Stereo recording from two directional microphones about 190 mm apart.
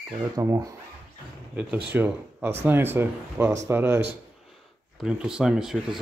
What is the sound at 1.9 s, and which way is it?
Speech, 10° right (ahead or behind).